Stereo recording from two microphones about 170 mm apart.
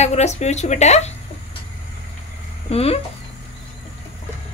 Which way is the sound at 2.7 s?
35° left (ahead or behind).